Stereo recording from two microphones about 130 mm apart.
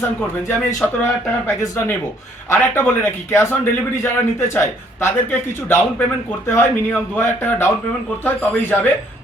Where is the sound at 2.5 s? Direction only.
20° left (ahead or behind).